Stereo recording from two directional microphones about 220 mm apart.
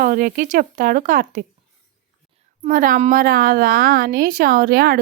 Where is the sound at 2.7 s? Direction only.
40° right (ahead or behind).